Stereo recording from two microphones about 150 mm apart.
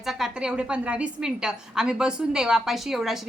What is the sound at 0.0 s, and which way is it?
A woman's voice, 5° right (ahead or behind).